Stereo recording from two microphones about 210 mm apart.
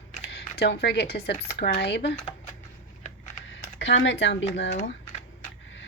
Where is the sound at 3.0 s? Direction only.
35° left (ahead or behind).